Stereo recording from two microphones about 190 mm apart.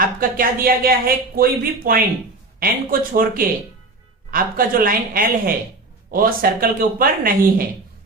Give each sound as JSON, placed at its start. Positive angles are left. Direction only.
{"t": 0.0, "sound": "speech", "side_deg": -50}